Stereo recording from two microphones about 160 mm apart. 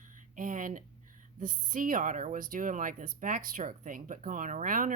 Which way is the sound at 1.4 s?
55° right (ahead or behind).